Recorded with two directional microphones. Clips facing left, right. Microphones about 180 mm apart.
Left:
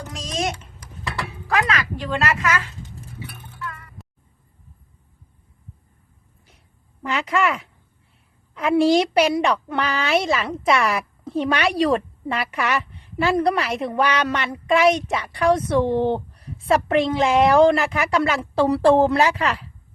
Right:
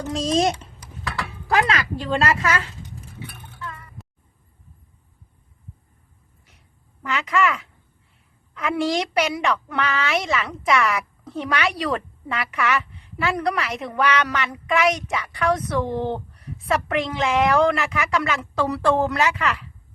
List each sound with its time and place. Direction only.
0.1 s a woman's voice: 30° right (ahead or behind)
3.2 s a sound: centre (ahead or behind)
7.0 s a woman's voice: 30° left (ahead or behind)